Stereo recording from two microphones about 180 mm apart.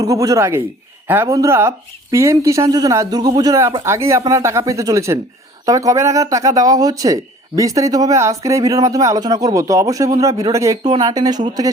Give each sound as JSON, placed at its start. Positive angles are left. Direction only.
{"t": 0.0, "sound": "speech", "side_deg": -20}